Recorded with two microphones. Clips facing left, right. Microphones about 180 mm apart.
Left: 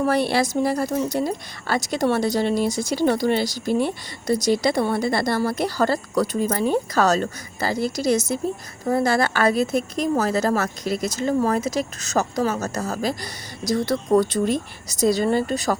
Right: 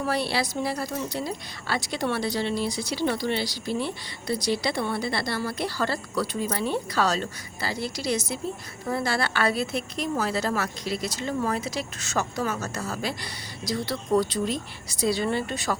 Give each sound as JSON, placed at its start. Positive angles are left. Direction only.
{"t": 0.0, "sound": "a woman's voice", "side_deg": 50}